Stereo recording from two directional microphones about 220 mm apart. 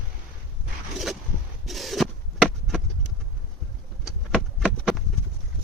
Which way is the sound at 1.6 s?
Centre (ahead or behind).